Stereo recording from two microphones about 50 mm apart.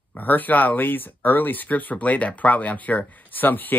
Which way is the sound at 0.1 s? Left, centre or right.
Left.